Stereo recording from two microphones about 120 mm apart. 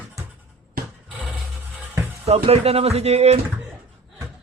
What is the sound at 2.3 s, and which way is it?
Speech, 60° right (ahead or behind).